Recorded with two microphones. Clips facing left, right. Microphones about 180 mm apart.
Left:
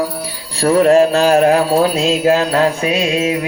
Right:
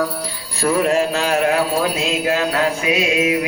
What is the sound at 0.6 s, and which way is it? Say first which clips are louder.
Jingle bell: left 7 dB; 35° left (ahead or behind).